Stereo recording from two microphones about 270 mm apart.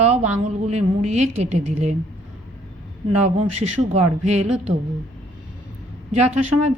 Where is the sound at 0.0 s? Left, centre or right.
Right.